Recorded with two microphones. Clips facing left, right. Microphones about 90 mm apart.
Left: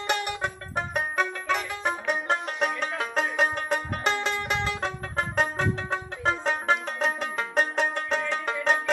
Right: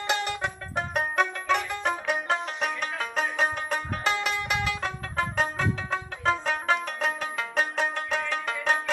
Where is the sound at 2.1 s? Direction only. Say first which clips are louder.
Left 1 dB; 35° left (ahead or behind).